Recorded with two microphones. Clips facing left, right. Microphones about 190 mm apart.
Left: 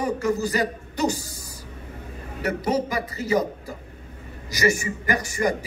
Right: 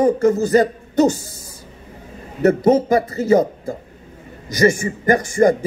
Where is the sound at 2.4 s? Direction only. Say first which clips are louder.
Right 10 dB; 50° right (ahead or behind).